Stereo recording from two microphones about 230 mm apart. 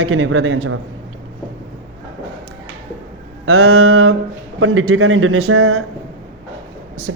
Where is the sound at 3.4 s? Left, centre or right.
Right.